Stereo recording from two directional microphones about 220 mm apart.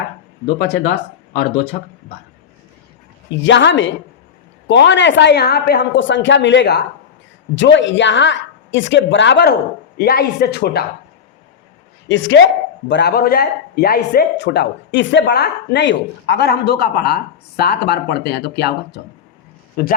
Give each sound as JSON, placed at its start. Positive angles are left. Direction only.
{"t": 0.6, "sound": "speech", "side_deg": 50}
{"t": 3.4, "sound": "a woman's voice", "side_deg": 55}
{"t": 12.0, "sound": "a woman's voice", "side_deg": 55}